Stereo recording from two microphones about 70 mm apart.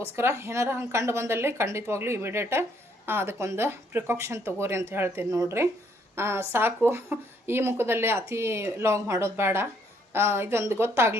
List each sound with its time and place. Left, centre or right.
0.0 s speech: right
5.3 s speech: right